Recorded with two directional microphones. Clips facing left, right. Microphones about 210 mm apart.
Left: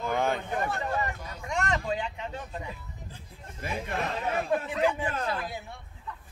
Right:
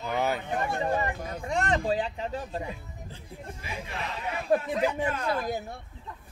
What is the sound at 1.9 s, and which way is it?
Speech, 35° right (ahead or behind).